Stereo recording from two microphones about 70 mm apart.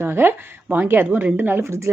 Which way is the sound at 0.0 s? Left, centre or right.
Right.